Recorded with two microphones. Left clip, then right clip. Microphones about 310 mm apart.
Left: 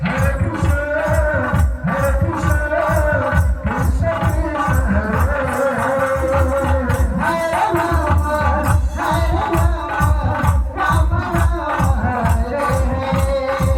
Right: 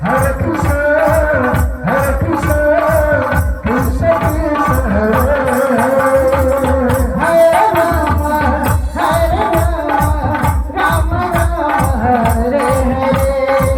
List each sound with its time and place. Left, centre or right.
6.8 s music: right